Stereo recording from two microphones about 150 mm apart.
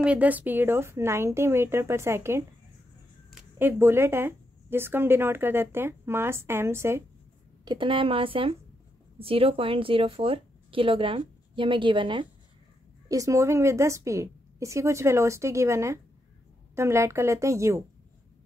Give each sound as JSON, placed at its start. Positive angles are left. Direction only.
{"t": 0.0, "sound": "a woman's voice", "side_deg": -10}
{"t": 3.5, "sound": "a woman's voice", "side_deg": -15}
{"t": 7.6, "sound": "speech", "side_deg": -30}
{"t": 13.1, "sound": "a woman's voice", "side_deg": -20}